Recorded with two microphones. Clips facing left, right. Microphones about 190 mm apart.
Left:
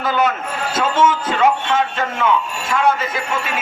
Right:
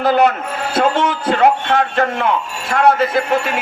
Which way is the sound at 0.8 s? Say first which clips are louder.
Right 1 dB; 65° right (ahead or behind).